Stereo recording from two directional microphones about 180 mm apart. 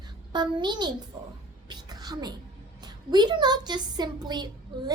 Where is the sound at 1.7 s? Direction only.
20° right (ahead or behind).